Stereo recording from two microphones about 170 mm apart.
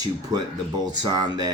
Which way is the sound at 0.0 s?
25° right (ahead or behind).